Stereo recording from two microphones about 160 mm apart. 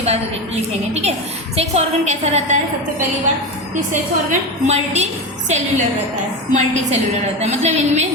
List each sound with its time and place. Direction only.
0.0 s a woman's voice: 40° right (ahead or behind)
4.3 s a woman's voice: 45° right (ahead or behind)